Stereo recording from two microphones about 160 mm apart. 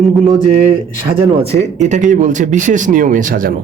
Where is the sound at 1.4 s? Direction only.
45° right (ahead or behind).